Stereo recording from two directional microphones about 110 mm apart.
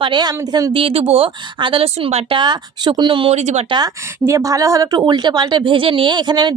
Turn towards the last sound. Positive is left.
turn(degrees=-45)  # may be behind; listen again after turning